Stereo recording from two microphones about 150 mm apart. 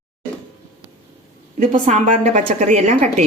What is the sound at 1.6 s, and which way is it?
A woman's voice, 50° right (ahead or behind).